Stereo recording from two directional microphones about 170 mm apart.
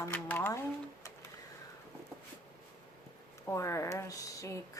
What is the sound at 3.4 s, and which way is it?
A woman's voice, 15° left (ahead or behind).